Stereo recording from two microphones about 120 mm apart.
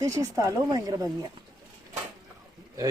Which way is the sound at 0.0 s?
25° right (ahead or behind).